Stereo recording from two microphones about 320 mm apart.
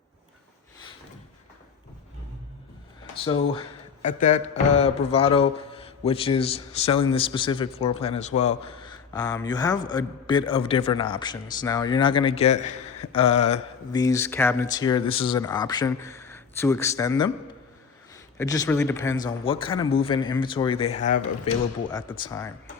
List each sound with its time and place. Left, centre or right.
3.2 s speech: centre
18.3 s speech: centre